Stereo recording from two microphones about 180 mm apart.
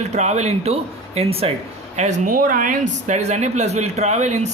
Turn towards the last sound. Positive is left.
turn(degrees=-40)  # may be behind; listen again after turning